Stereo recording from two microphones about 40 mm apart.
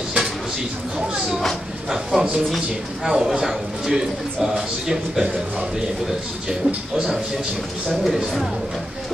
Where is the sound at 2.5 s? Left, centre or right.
Centre.